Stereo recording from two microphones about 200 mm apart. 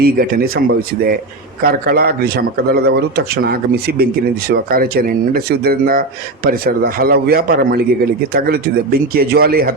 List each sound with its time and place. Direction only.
0.0 s speech: 50° right (ahead or behind)